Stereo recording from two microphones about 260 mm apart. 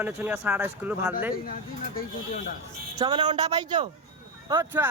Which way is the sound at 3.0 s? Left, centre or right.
Centre.